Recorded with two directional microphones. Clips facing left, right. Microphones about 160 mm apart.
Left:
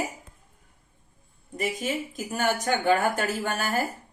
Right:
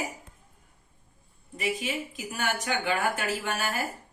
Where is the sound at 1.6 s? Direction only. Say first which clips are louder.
Left 2 dB; 45° left (ahead or behind).